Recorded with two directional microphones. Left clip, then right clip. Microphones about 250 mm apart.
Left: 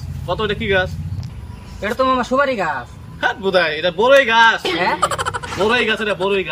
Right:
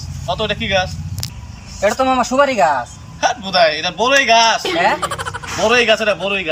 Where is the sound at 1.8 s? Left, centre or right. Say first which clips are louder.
Right 3 dB; centre.